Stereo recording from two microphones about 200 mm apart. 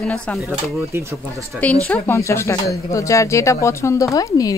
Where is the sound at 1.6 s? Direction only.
10° left (ahead or behind).